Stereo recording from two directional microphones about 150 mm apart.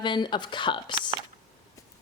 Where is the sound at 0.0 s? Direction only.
30° left (ahead or behind).